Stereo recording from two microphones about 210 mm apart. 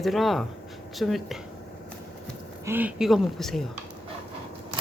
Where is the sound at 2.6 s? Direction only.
10° right (ahead or behind).